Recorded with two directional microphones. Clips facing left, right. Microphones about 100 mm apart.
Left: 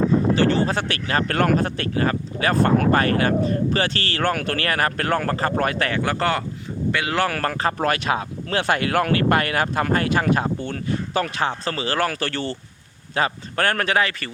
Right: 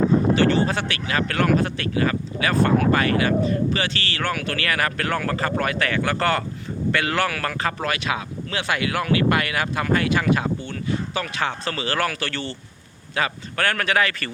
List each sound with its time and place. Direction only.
0.3 s speech: 35° left (ahead or behind); by 7.2 s 15° left (ahead or behind)
7.2 s speech: 35° left (ahead or behind)